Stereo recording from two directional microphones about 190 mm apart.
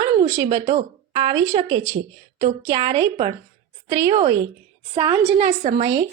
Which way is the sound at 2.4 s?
35° right (ahead or behind).